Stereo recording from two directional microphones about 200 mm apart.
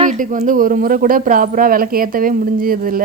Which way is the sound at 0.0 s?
40° right (ahead or behind).